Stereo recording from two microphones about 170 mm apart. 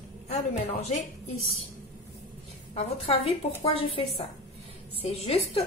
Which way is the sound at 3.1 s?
35° left (ahead or behind).